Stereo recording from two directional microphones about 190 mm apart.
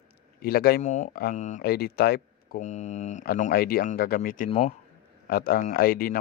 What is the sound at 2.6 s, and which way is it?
A man's voice, 40° left (ahead or behind).